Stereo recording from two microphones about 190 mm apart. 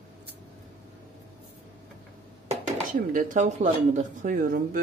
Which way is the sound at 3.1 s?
40° right (ahead or behind).